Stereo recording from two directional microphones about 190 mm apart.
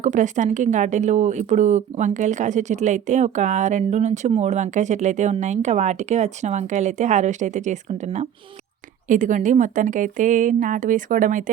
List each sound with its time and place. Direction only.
0.0 s speech: 40° right (ahead or behind)